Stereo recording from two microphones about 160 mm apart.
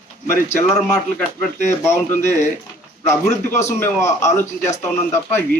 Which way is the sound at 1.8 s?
15° left (ahead or behind).